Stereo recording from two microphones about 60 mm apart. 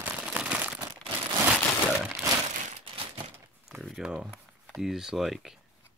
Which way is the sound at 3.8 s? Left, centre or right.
Centre.